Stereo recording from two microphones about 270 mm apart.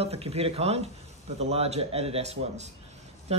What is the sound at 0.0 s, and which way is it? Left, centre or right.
Speech, right.